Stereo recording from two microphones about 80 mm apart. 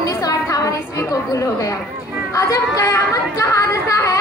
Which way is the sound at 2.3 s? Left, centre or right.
Left.